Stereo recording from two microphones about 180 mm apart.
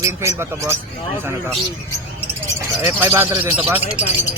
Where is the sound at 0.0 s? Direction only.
15° right (ahead or behind).